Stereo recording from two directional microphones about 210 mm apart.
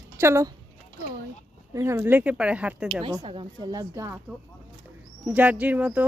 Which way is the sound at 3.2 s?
25° right (ahead or behind).